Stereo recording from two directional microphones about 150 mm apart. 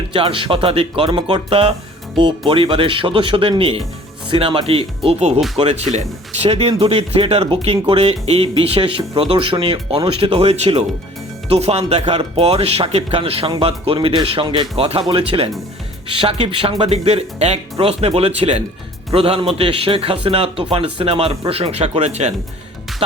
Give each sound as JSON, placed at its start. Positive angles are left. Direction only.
{"t": 0.1, "sound": "speech", "side_deg": -35}